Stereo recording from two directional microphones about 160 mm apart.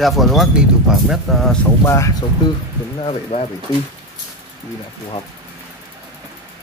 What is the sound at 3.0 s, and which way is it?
Speech, 35° left (ahead or behind).